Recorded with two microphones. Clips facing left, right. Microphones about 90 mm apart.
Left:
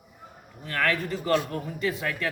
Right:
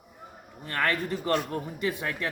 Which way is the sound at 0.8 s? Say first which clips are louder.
Left 1 dB; 20° right (ahead or behind).